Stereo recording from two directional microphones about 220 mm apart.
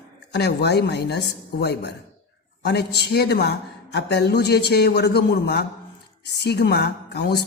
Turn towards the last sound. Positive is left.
turn(degrees=50)  # may be behind; listen again after turning